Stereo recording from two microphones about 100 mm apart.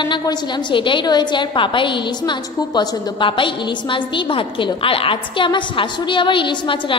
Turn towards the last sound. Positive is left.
turn(degrees=55)  # may be behind; listen again after turning